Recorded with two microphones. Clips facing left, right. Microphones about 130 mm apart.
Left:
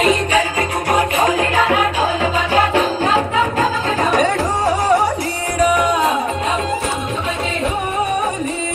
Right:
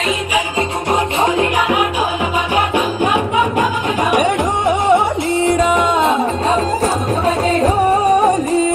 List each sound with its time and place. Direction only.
0.9 s music: 25° right (ahead or behind)